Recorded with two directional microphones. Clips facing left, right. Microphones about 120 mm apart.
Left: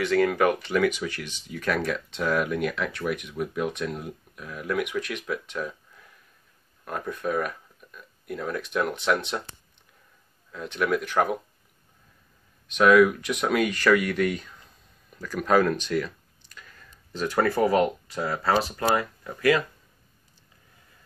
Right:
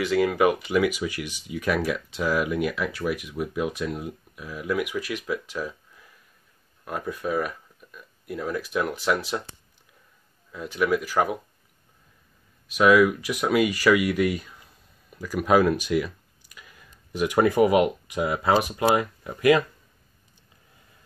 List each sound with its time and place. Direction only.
0.0 s speech: 5° right (ahead or behind)
10.5 s speech: 5° right (ahead or behind)
12.6 s speech: 5° right (ahead or behind)